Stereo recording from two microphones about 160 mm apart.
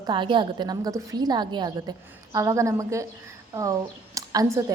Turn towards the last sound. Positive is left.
turn(degrees=-20)  # may be behind; listen again after turning